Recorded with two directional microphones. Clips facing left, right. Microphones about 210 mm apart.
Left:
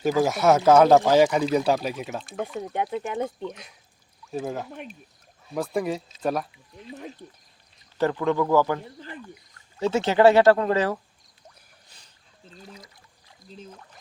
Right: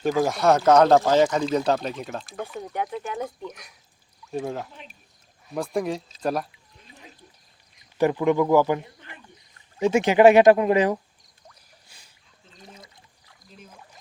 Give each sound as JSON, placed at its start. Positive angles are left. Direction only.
{"t": 0.0, "sound": "speech", "side_deg": 5}
{"t": 2.7, "sound": "speech", "side_deg": 25}
{"t": 4.3, "sound": "speech", "side_deg": 0}
{"t": 7.8, "sound": "speech", "side_deg": -15}
{"t": 11.9, "sound": "a sound", "side_deg": -10}